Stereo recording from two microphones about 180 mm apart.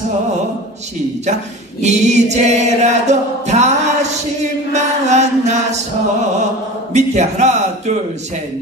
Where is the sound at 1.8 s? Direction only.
40° right (ahead or behind).